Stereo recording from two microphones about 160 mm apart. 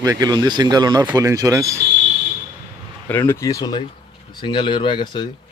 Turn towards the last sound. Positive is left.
turn(degrees=30)  # may be behind; listen again after turning